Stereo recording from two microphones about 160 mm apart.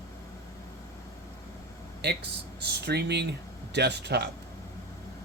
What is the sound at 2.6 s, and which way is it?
Speech, 90° right.